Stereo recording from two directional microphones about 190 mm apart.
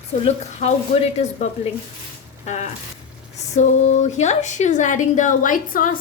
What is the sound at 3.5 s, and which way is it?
A woman's voice, 40° left (ahead or behind).